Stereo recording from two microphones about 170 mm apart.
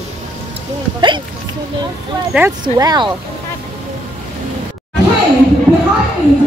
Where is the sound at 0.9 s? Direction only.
30° right (ahead or behind).